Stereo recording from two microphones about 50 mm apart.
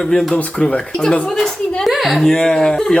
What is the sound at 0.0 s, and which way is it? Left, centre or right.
Speech, centre.